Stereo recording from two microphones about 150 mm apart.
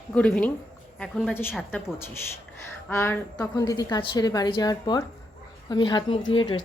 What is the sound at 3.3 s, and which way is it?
Speech, 25° left (ahead or behind).